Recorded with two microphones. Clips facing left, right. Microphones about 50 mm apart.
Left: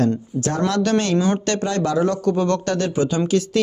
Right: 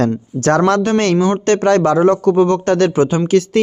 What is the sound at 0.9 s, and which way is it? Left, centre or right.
Speech, right.